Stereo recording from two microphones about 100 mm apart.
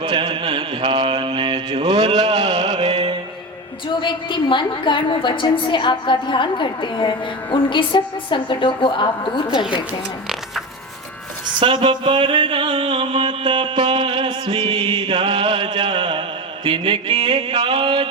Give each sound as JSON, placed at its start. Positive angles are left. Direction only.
{"t": 0.0, "sound": "mantra", "side_deg": -50}
{"t": 2.2, "sound": "music", "side_deg": -90}
{"t": 3.8, "sound": "a woman's voice", "side_deg": 50}
{"t": 11.6, "sound": "a sound", "side_deg": -55}